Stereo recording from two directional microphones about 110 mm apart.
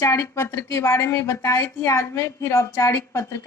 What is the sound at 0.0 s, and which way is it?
A woman's voice, 25° left (ahead or behind).